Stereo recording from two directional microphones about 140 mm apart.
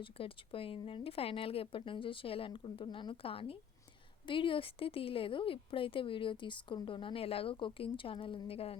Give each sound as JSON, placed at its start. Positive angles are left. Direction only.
{"t": 0.0, "sound": "speech", "side_deg": 40}